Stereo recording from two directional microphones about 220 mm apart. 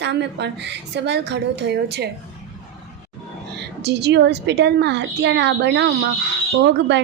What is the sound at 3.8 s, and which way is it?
A woman's voice, 50° right (ahead or behind).